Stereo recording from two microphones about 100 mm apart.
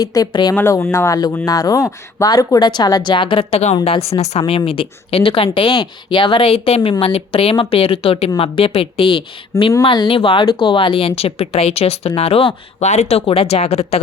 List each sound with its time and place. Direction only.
0.0 s speech: 40° left (ahead or behind)
0.7 s speech: 30° left (ahead or behind); by 3.7 s 65° left (ahead or behind)
3.8 s a woman's voice: 80° left